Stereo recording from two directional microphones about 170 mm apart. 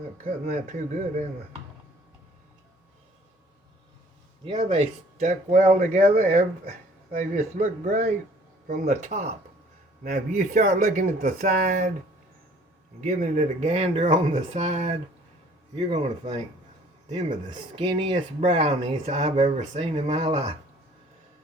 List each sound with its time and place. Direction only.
0.4 s speech: 45° right (ahead or behind)
4.4 s speech: 35° right (ahead or behind)
5.2 s speech: 50° right (ahead or behind)
13.0 s speech: 45° right (ahead or behind)
17.5 s speech: 30° right (ahead or behind)